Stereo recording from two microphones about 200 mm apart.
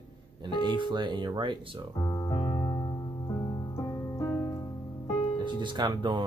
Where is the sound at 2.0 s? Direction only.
20° left (ahead or behind).